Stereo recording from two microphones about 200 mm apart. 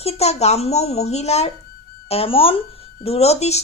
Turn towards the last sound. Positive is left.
turn(degrees=30)  # may be behind; listen again after turning